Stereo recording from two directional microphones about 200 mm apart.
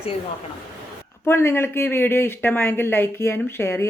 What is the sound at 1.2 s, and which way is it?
Speech, 10° left (ahead or behind).